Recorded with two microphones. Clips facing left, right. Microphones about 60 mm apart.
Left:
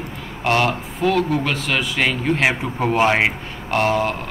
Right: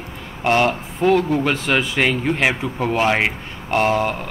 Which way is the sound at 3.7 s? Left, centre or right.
Centre.